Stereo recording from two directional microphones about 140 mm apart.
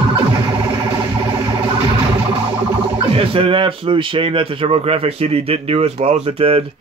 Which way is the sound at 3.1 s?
40° right (ahead or behind).